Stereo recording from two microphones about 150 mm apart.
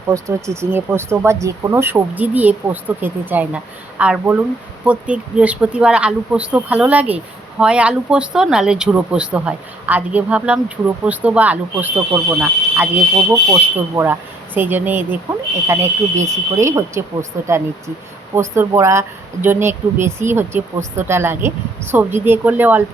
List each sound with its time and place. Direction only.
0.1 s speech: 20° right (ahead or behind)